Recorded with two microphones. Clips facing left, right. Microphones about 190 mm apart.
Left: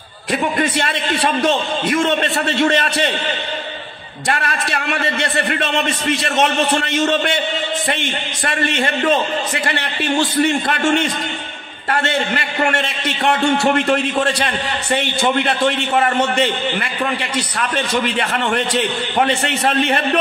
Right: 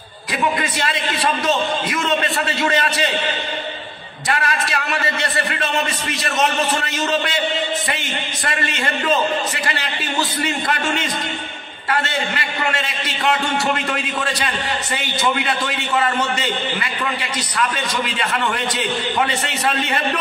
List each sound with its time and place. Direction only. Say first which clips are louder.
0.3 s speech: left 3 dB; 55° left (ahead or behind)
4.3 s speech: left 1 dB; 50° left (ahead or behind)
10.7 s speech: left 5 dB; 50° left (ahead or behind)
14.4 s a man's voice: left 2 dB; 55° left (ahead or behind)